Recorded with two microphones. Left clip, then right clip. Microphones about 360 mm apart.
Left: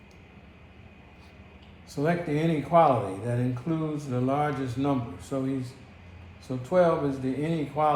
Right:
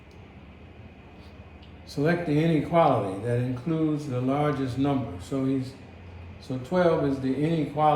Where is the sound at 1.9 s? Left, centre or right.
Centre.